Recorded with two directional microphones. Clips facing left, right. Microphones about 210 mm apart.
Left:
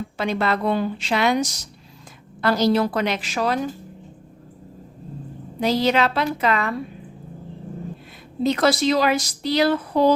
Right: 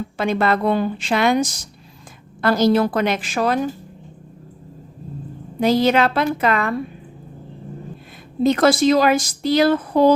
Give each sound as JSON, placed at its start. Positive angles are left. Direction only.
{"t": 0.2, "sound": "a woman's voice", "side_deg": -50}
{"t": 5.5, "sound": "a woman's voice", "side_deg": -50}
{"t": 8.4, "sound": "a woman's voice", "side_deg": -50}